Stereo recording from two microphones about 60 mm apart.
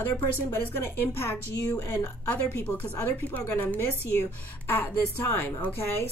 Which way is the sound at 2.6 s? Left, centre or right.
Left.